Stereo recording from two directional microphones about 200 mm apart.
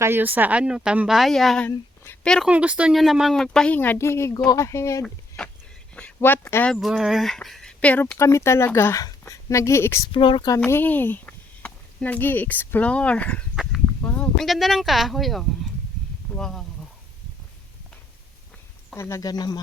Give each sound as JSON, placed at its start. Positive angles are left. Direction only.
{"t": 0.0, "sound": "speech", "side_deg": -10}
{"t": 5.9, "sound": "a sound", "side_deg": 5}
{"t": 6.1, "sound": "speech", "side_deg": 10}
{"t": 6.7, "sound": "speech", "side_deg": 0}
{"t": 10.1, "sound": "speech", "side_deg": 25}
{"t": 10.6, "sound": "speech", "side_deg": 10}
{"t": 18.9, "sound": "speech", "side_deg": 15}